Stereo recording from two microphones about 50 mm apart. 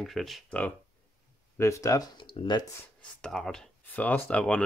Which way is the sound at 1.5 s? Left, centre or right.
Left.